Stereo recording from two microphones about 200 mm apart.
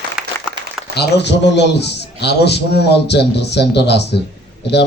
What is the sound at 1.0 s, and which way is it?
A man's voice, 60° left (ahead or behind).